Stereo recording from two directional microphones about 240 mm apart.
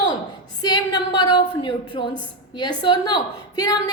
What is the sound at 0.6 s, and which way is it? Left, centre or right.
A woman's voice, centre.